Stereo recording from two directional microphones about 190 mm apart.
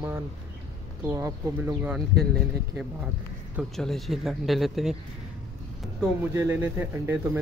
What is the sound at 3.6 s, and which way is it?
Speech, centre (ahead or behind).